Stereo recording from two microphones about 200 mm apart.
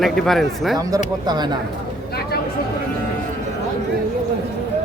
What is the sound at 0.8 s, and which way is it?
Speech, 15° right (ahead or behind).